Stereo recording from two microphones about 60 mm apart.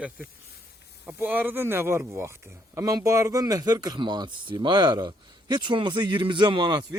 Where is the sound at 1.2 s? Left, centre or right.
Right.